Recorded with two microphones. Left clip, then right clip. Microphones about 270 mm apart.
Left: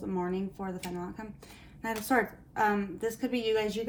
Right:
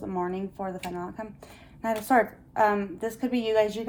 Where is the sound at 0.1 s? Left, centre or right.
Right.